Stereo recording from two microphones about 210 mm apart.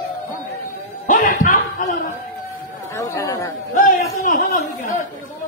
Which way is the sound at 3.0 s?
15° left (ahead or behind).